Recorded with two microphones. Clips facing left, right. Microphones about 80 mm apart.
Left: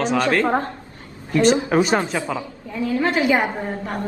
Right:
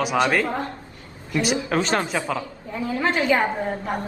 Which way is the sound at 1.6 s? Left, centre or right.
Centre.